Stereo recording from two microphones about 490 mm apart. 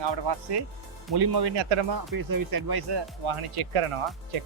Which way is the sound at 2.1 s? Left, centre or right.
Right.